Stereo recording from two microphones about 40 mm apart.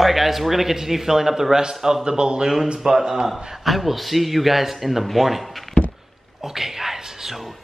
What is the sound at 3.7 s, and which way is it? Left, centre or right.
A man's voice, centre.